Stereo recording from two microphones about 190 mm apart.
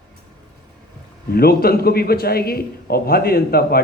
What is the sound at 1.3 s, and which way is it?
A man's voice, 55° left (ahead or behind).